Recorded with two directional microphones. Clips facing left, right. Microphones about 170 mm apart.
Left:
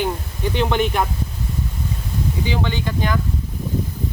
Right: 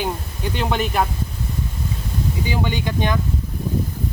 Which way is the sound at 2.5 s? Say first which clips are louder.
Right 1 dB; 15° right (ahead or behind).